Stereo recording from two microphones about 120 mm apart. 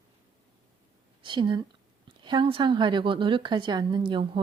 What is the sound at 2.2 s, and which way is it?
A woman's voice, 40° right (ahead or behind).